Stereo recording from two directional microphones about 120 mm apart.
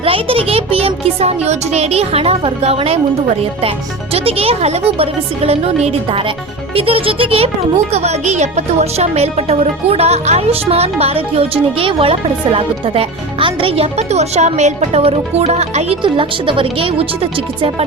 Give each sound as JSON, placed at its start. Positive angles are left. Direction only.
{"t": 0.0, "sound": "speech", "side_deg": -50}
{"t": 7.9, "sound": "speech", "side_deg": -65}
{"t": 16.0, "sound": "speech", "side_deg": -45}